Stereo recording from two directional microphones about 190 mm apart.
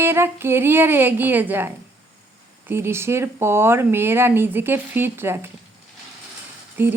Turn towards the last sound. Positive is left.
turn(degrees=-10)  # may be behind; listen again after turning